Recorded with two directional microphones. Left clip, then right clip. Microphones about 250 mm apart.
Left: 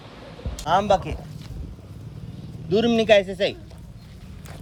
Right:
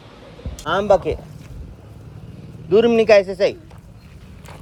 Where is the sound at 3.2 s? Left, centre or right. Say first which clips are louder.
Right 5 dB; centre.